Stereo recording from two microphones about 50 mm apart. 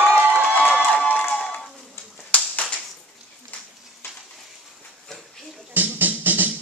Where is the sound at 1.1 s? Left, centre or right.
Left.